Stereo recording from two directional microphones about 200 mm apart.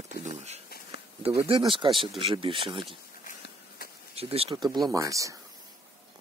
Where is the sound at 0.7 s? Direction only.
50° left (ahead or behind).